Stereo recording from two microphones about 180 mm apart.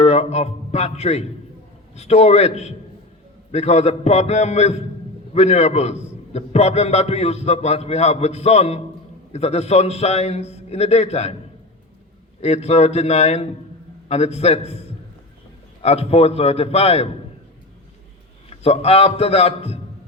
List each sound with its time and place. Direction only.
0.0 s a man's voice: 35° left (ahead or behind)
12.4 s a man's voice: 35° left (ahead or behind)
18.6 s a man's voice: 35° left (ahead or behind)